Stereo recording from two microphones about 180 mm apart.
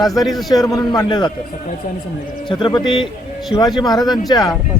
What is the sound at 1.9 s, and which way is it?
Speech, 45° left (ahead or behind).